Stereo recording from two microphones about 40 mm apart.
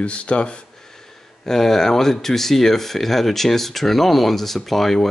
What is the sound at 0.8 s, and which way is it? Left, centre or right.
Speech, centre.